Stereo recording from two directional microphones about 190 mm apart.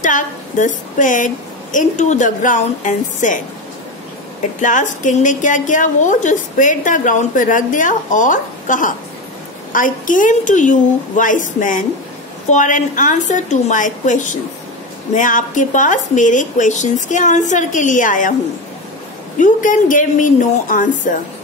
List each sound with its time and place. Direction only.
0.0 s a woman's voice: 40° left (ahead or behind)
4.6 s a woman's voice: 40° left (ahead or behind)
19.3 s a woman's voice: 45° left (ahead or behind)